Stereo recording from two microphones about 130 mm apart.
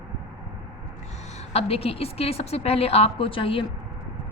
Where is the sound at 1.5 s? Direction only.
50° left (ahead or behind).